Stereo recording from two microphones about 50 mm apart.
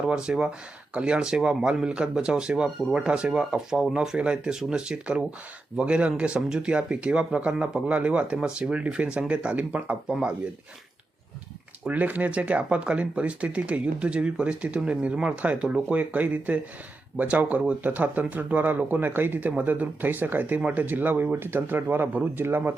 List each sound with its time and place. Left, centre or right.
0.1 s speech: centre
10.1 s speech: centre
11.9 s speech: right